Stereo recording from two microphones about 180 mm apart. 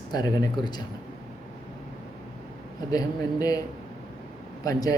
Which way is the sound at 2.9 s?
20° left (ahead or behind).